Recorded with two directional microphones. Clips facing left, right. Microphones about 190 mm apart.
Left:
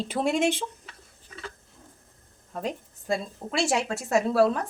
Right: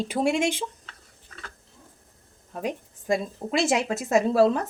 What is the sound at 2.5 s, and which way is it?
A woman's voice, 10° right (ahead or behind).